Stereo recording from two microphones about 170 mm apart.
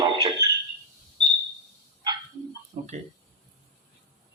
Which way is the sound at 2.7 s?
45° right (ahead or behind).